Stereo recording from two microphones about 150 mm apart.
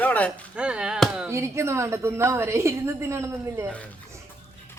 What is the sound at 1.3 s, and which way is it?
A woman's voice, 20° right (ahead or behind).